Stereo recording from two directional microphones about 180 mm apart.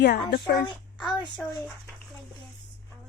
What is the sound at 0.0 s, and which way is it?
Speech, 65° left (ahead or behind).